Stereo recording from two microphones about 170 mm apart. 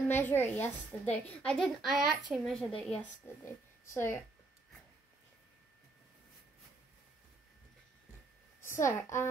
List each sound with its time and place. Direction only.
0.1 s a woman's voice: 10° left (ahead or behind)
8.8 s a woman's voice: 15° left (ahead or behind)